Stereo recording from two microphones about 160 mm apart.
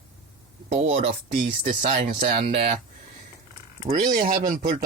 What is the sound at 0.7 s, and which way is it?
Speech, 45° right (ahead or behind).